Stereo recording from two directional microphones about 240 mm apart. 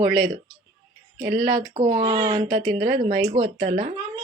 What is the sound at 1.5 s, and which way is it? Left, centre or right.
Speech, right.